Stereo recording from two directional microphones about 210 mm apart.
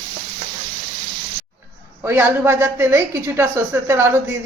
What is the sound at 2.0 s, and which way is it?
Speech, 10° right (ahead or behind).